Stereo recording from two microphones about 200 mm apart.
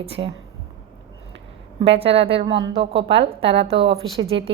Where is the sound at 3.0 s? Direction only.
60° right (ahead or behind).